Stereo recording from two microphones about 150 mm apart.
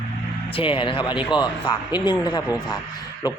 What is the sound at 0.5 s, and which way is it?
Speech, 35° left (ahead or behind).